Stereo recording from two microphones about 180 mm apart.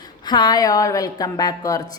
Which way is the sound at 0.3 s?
25° left (ahead or behind).